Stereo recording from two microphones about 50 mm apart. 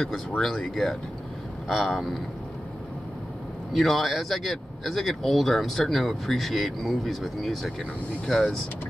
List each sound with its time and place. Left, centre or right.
0.4 s speech: centre
3.7 s speech: centre